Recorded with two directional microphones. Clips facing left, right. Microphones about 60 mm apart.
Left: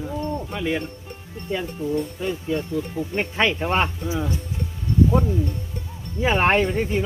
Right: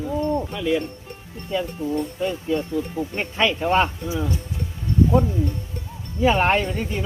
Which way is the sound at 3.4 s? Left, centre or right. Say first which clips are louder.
Right 3 dB; left.